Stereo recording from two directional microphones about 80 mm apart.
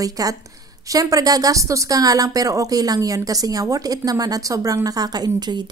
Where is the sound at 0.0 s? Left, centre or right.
Right.